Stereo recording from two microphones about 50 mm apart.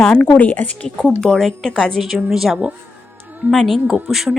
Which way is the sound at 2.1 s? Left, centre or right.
Centre.